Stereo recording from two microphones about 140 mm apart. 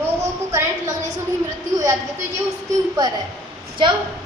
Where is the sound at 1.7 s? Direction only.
25° right (ahead or behind).